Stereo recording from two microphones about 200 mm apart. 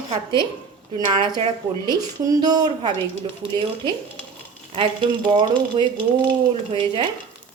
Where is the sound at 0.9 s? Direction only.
25° right (ahead or behind).